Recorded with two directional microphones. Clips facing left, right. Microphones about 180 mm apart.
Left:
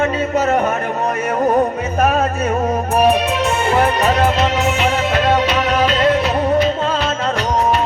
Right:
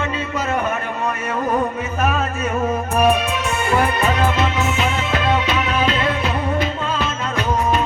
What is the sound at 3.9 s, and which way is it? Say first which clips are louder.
Music: left 3 dB; 40° left (ahead or behind).